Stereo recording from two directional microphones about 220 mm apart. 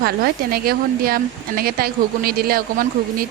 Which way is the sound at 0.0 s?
45° right (ahead or behind).